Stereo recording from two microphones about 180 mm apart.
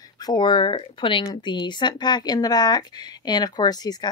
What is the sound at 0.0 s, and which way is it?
A woman's voice, 20° left (ahead or behind).